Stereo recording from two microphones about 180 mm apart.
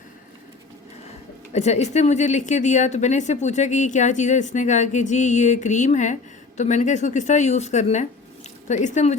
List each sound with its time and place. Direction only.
1.5 s a woman's voice: 40° left (ahead or behind)